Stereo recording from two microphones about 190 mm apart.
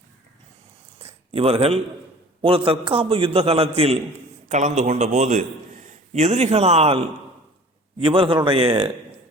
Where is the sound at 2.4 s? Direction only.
30° right (ahead or behind).